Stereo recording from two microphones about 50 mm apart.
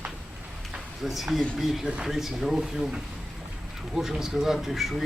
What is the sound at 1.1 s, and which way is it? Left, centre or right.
Speech, centre.